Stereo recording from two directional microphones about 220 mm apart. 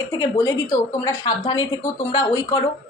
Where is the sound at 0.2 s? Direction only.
15° left (ahead or behind).